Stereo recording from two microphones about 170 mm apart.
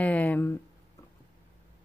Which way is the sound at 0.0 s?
10° left (ahead or behind).